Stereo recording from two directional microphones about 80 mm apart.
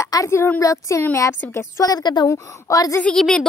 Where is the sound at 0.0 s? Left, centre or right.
Left.